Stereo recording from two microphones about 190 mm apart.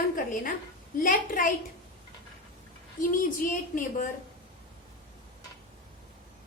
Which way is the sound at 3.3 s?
45° left (ahead or behind).